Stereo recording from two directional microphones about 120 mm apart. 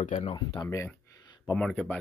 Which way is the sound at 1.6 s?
5° left (ahead or behind).